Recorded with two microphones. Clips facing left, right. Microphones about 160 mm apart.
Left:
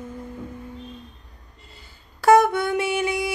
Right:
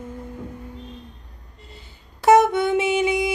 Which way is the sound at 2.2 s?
20° right (ahead or behind).